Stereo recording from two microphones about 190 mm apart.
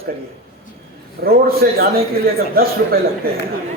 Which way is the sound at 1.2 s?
55° right (ahead or behind).